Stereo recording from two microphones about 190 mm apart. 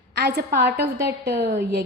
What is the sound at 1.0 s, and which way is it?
Speech, 15° right (ahead or behind).